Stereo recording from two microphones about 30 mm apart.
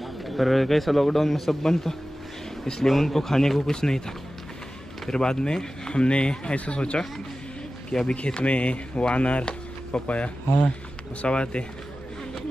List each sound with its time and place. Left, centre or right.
0.0 s a man's voice: centre
1.6 s speech: centre
2.9 s speech: centre
5.1 s speech: left
7.9 s speech: centre
8.4 s speech: left
9.4 s a sound: left
10.0 s speech: left